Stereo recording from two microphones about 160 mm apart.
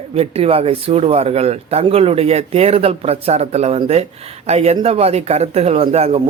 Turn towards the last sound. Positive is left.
turn(degrees=-40)  # may be behind; listen again after turning